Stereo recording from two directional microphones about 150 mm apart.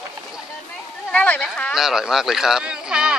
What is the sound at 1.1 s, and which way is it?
Speech, 10° left (ahead or behind).